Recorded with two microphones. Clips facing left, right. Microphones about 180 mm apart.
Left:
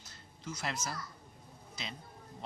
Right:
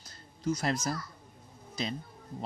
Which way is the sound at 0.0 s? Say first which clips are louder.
Right 12 dB; 40° right (ahead or behind).